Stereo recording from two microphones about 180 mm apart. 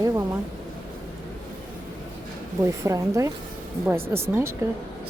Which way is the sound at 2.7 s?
15° right (ahead or behind).